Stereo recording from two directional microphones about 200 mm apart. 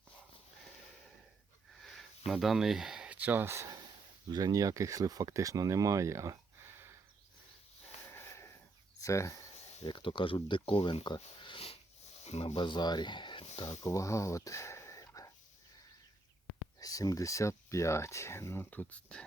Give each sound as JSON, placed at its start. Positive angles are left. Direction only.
{"t": 1.8, "sound": "a sound", "side_deg": 0}
{"t": 4.3, "sound": "speech", "side_deg": -20}
{"t": 8.1, "sound": "a sound", "side_deg": 15}
{"t": 9.0, "sound": "speech", "side_deg": 15}
{"t": 13.7, "sound": "speech", "side_deg": 15}
{"t": 16.8, "sound": "speech", "side_deg": 20}